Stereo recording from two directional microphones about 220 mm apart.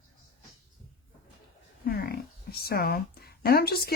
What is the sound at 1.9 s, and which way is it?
Speech, 45° left (ahead or behind).